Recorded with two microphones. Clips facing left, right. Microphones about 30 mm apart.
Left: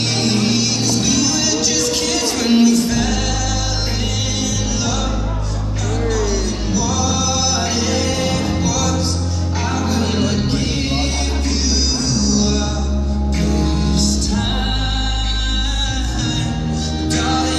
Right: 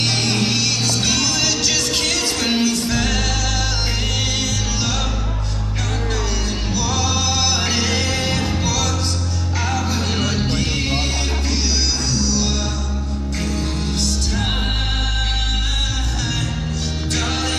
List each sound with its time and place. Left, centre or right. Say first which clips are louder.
0.1 s music: left 2 dB; centre
6.7 s music: left 2 dB; right
9.8 s music: left 3 dB; centre
12.3 s music: left 4 dB; centre
17.1 s music: left 5 dB; centre